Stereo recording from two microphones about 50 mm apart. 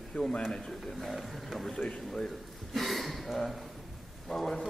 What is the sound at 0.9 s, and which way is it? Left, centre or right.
A man's voice, centre.